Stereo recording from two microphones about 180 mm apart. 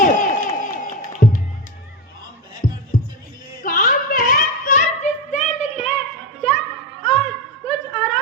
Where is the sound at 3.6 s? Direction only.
50° left (ahead or behind).